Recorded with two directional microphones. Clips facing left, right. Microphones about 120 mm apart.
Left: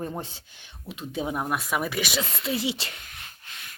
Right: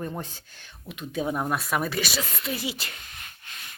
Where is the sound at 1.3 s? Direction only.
10° left (ahead or behind).